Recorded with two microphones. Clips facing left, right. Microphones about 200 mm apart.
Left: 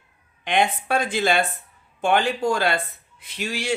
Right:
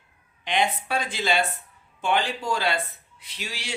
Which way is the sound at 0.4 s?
50° left (ahead or behind).